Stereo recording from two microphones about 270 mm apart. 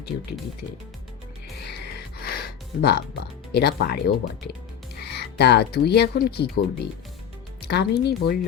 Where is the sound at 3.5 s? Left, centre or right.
Left.